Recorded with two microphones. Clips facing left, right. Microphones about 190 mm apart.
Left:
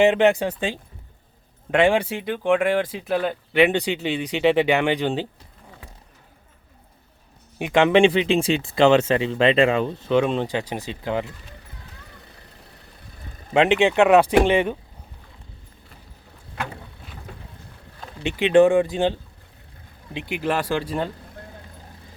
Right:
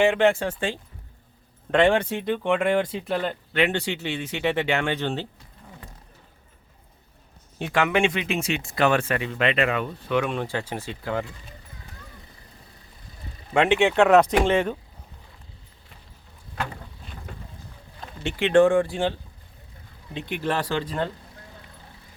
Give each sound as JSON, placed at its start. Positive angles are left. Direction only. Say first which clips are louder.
{"t": 0.0, "sound": "speech", "louder": "left 3 dB", "side_deg": 20}
{"t": 7.6, "sound": "speech", "louder": "left 6 dB", "side_deg": 25}
{"t": 13.5, "sound": "speech", "louder": "left 2 dB", "side_deg": 20}
{"t": 18.2, "sound": "speech", "louder": "left 2 dB", "side_deg": 15}
{"t": 20.2, "sound": "speech", "louder": "left 3 dB", "side_deg": 10}